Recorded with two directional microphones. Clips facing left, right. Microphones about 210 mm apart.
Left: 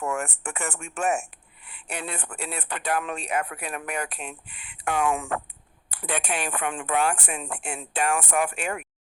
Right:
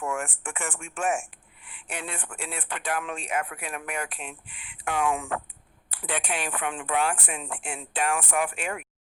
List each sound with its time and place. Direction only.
0.0 s speech: 40° left (ahead or behind)